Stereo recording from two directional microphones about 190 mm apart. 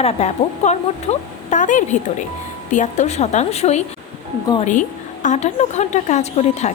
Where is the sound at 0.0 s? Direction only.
35° left (ahead or behind).